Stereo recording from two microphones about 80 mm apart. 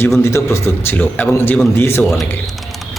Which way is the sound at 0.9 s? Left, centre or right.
Left.